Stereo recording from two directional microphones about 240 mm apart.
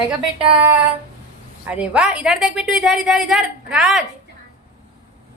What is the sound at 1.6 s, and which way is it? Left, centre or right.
A woman's voice, centre.